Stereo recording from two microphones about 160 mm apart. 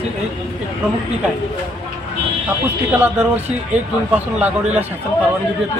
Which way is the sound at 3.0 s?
10° right (ahead or behind).